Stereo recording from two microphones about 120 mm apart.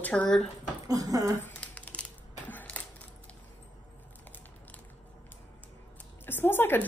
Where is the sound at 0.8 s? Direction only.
30° right (ahead or behind).